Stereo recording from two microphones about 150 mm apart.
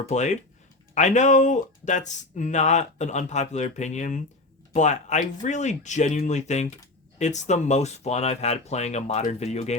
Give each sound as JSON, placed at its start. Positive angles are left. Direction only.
{"t": 0.1, "sound": "speech", "side_deg": 50}